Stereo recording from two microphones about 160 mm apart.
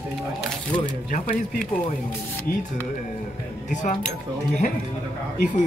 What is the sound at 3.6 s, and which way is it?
Speech, 50° left (ahead or behind).